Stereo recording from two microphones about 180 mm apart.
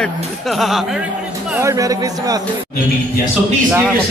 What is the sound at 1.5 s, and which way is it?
Speech, 15° right (ahead or behind).